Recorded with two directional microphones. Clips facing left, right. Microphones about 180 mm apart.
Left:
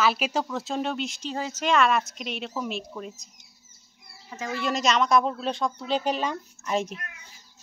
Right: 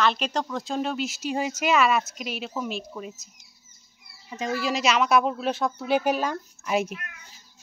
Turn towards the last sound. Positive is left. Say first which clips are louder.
# right 2 dB
turn(degrees=-5)  # may be behind; listen again after turning